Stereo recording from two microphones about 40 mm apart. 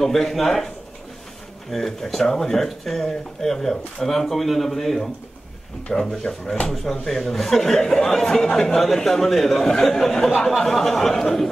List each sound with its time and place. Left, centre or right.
0.0 s speech: centre
1.7 s speech: centre